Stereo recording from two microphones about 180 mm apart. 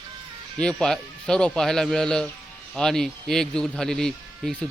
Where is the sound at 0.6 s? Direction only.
5° left (ahead or behind).